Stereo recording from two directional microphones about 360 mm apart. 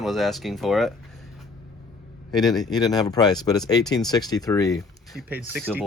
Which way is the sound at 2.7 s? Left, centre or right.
Centre.